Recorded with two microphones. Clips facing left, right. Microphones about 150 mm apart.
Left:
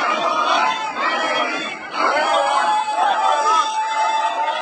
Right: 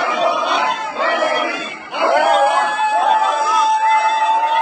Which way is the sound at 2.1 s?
55° right (ahead or behind).